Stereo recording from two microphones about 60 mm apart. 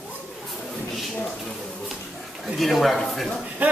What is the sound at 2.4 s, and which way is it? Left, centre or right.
Speech, centre.